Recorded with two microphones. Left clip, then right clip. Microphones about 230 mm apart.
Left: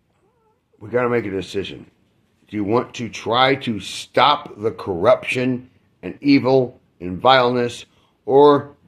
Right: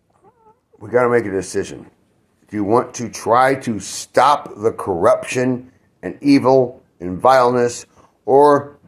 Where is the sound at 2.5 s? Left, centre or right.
Centre.